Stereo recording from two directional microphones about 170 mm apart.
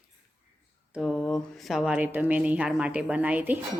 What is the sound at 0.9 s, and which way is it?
Speech, centre (ahead or behind).